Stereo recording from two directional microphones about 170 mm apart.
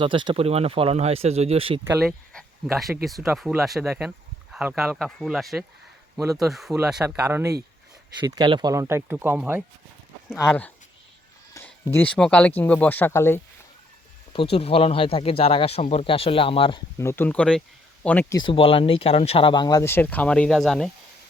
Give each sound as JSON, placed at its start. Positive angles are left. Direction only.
{"t": 0.0, "sound": "speech", "side_deg": -30}
{"t": 2.0, "sound": "speech", "side_deg": 0}
{"t": 8.2, "sound": "speech", "side_deg": -25}
{"t": 10.3, "sound": "speech", "side_deg": 10}
{"t": 11.9, "sound": "speech", "side_deg": 5}
{"t": 14.5, "sound": "speech", "side_deg": 35}
{"t": 17.0, "sound": "speech", "side_deg": 15}
{"t": 18.3, "sound": "speech", "side_deg": 30}